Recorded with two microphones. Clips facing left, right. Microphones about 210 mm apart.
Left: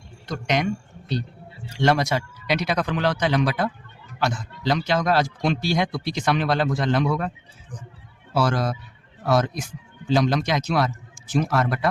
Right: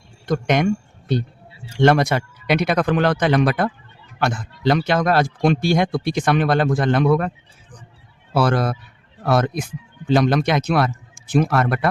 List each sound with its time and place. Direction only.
0.3 s a man's voice: 50° right (ahead or behind)